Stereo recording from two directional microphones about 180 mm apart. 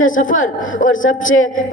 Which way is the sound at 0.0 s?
45° left (ahead or behind).